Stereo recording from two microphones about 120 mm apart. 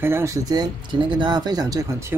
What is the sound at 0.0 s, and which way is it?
Speech, 20° right (ahead or behind).